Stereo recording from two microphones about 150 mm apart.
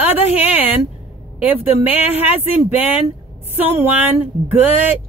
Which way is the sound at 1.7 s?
45° left (ahead or behind).